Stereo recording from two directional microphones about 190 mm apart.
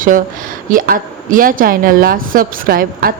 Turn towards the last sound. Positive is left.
turn(degrees=-50)  # may be behind; listen again after turning